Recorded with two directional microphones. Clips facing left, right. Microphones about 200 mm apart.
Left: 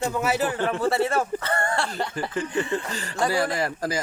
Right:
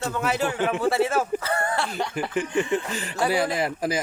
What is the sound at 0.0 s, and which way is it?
Speech, 5° left (ahead or behind).